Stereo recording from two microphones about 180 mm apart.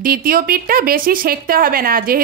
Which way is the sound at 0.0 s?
55° right (ahead or behind).